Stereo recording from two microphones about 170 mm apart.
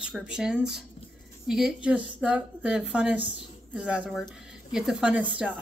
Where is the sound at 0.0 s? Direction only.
5° right (ahead or behind).